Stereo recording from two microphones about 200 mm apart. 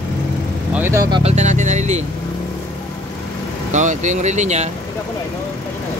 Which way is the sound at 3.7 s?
35° right (ahead or behind).